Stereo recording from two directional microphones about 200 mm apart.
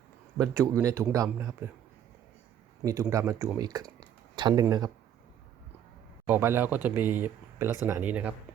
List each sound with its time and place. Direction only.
0.3 s speech: 15° right (ahead or behind)
2.8 s speech: 15° right (ahead or behind)
4.4 s a sound: 20° right (ahead or behind)
4.6 s speech: 20° right (ahead or behind)
6.2 s speech: 10° right (ahead or behind)